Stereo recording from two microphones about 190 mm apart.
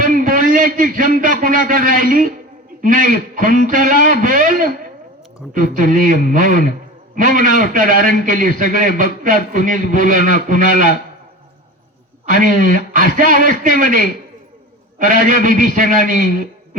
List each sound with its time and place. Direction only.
0.0 s a sound: 45° right (ahead or behind)
1.2 s a man's voice: 45° right (ahead or behind)
12.2 s a man's voice: 45° right (ahead or behind)